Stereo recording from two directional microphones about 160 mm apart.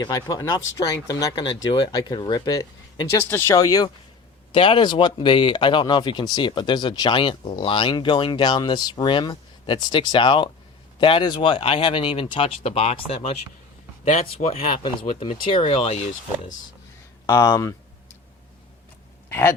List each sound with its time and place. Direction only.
0.0 s speech: 20° left (ahead or behind); by 13.0 s 40° left (ahead or behind)
14.1 s speech: 40° left (ahead or behind)
17.2 s speech: 25° left (ahead or behind)
19.3 s speech: 15° left (ahead or behind)